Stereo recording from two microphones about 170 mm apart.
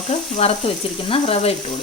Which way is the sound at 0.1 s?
40° left (ahead or behind).